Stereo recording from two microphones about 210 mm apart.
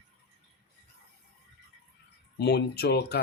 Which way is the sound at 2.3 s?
50° left (ahead or behind).